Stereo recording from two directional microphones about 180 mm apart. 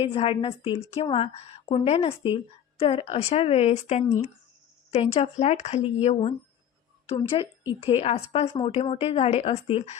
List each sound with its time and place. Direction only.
0.0 s a woman's voice: 30° left (ahead or behind)